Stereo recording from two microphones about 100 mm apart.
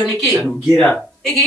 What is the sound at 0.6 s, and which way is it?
Speech, centre (ahead or behind).